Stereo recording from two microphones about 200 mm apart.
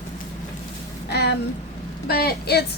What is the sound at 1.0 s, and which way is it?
Speech, 55° left (ahead or behind).